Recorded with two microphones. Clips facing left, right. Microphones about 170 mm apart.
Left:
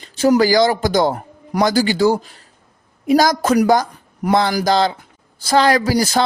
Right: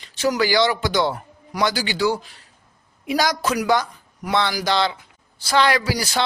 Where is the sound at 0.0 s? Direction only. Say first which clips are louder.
Left 7 dB; 40° left (ahead or behind).